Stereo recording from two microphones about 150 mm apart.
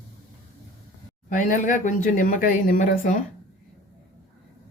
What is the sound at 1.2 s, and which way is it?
Speech, 60° left (ahead or behind).